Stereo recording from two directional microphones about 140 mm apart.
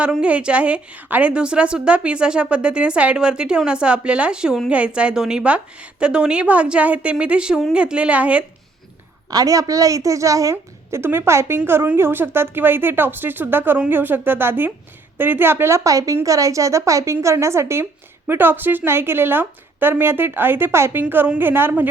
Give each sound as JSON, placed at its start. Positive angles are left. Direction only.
{"t": 0.0, "sound": "a woman's voice", "side_deg": -10}
{"t": 9.3, "sound": "a woman's voice", "side_deg": -25}